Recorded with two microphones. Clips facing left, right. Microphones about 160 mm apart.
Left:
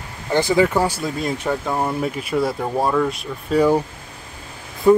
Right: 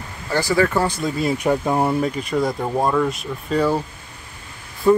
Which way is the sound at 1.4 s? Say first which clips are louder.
Right 4 dB; 15° right (ahead or behind).